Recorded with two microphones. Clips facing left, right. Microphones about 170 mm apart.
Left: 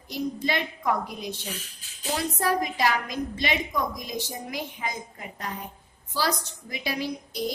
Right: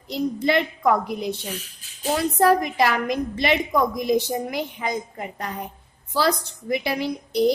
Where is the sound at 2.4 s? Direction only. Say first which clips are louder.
Right 7 dB; 60° right (ahead or behind).